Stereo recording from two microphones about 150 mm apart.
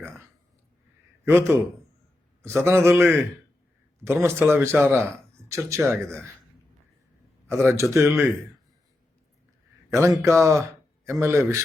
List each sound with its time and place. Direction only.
1.2 s a man's voice: 15° right (ahead or behind)
7.4 s speech: 20° right (ahead or behind)
9.9 s speech: 20° right (ahead or behind)